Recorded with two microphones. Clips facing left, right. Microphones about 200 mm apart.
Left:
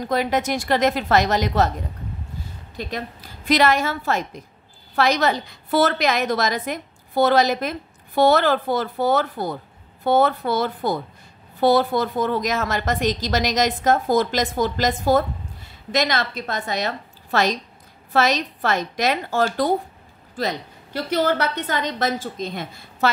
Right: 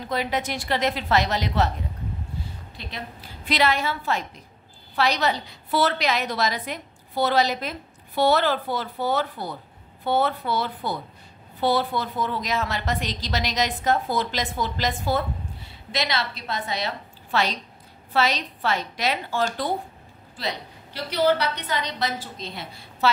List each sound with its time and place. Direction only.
0.0 s a woman's voice: 45° left (ahead or behind)
2.8 s a woman's voice: 45° left (ahead or behind)